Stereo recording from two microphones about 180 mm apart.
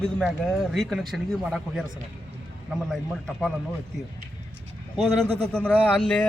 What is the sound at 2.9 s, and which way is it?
Speech, 5° left (ahead or behind).